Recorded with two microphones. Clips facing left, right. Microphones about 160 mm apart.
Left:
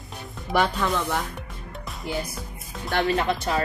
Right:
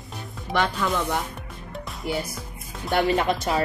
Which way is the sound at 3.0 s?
15° right (ahead or behind).